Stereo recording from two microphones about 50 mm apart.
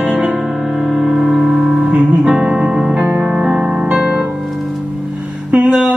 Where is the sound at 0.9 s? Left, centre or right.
Centre.